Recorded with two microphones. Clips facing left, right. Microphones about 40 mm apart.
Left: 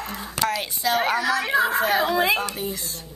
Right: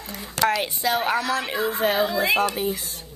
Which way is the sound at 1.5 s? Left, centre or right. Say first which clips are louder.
Left 5 dB; left.